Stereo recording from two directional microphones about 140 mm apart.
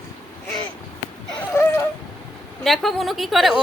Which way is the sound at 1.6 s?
20° left (ahead or behind).